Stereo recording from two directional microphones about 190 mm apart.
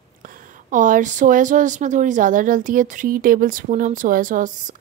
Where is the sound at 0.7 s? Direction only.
45° right (ahead or behind).